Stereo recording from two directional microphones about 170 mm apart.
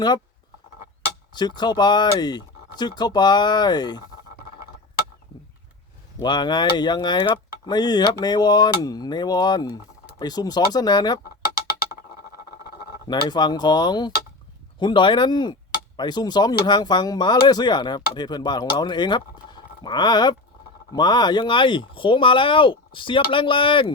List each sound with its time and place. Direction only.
1.3 s speech: 25° left (ahead or behind)
6.1 s speech: 25° left (ahead or behind)
13.1 s speech: 25° left (ahead or behind)